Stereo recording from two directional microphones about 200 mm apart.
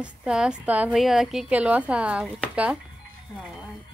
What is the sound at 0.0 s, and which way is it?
Speech, 5° right (ahead or behind).